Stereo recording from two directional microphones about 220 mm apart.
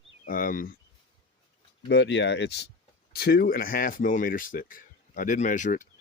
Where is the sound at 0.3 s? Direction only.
40° left (ahead or behind).